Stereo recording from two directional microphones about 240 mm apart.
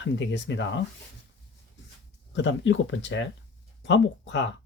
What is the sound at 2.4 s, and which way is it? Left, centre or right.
Speech, left.